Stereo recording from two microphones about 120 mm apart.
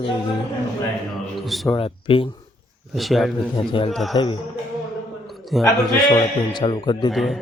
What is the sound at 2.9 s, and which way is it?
Speech, centre (ahead or behind).